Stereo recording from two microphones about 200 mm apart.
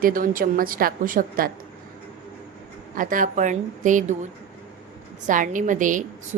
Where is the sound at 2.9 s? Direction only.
45° right (ahead or behind).